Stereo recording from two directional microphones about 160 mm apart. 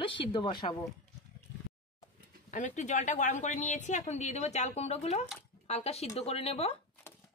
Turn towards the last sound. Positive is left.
turn(degrees=40)  # may be behind; listen again after turning